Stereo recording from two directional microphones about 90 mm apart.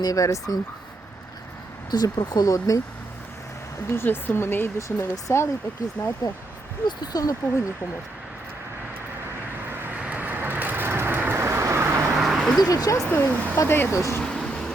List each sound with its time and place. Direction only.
0.0 s speech: 40° left (ahead or behind)
1.9 s speech: 50° left (ahead or behind)
3.8 s speech: 25° left (ahead or behind)
6.8 s speech: 50° left (ahead or behind)
9.6 s vehicle: 25° right (ahead or behind)
12.1 s a sound: centre (ahead or behind)
12.5 s speech: 45° left (ahead or behind)
13.1 s speech: 20° left (ahead or behind)
13.7 s speech: 30° left (ahead or behind)
14.2 s a sound: 10° left (ahead or behind)